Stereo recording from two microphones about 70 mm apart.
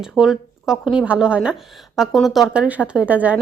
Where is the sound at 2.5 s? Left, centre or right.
Centre.